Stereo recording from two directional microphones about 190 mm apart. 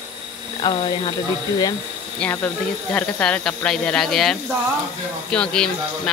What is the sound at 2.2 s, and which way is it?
A woman's voice, 10° left (ahead or behind).